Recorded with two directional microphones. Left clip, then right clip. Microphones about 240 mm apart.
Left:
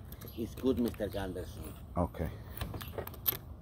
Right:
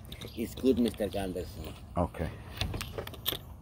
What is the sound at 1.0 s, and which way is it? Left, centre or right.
Speech, right.